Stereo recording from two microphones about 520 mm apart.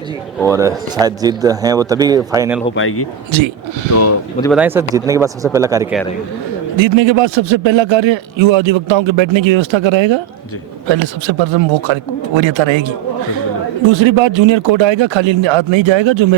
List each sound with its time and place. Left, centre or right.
0.3 s speech: centre
2.7 s speech: left
4.4 s speech: centre
6.7 s speech: right
13.9 s speech: right